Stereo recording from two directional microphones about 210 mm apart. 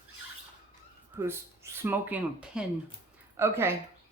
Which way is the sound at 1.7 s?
10° right (ahead or behind).